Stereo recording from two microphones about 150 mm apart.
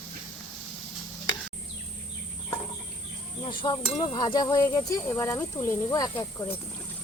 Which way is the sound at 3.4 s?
35° left (ahead or behind).